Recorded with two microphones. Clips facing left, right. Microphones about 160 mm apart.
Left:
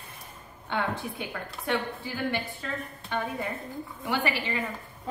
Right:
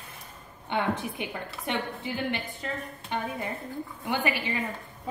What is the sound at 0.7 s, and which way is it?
Speech, 20° right (ahead or behind).